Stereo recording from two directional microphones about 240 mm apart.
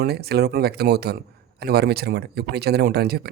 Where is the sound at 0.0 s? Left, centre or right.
Right.